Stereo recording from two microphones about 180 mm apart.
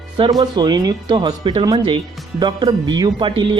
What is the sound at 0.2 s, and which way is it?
Speech, 25° right (ahead or behind).